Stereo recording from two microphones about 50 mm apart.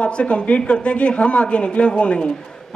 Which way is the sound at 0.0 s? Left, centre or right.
Left.